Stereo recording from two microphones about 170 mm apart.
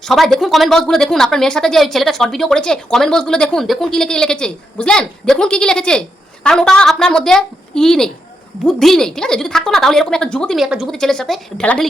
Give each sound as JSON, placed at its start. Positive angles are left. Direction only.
{"t": 0.0, "sound": "speech", "side_deg": 0}